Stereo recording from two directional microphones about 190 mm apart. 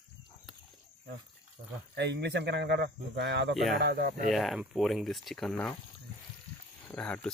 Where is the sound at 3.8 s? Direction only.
55° right (ahead or behind).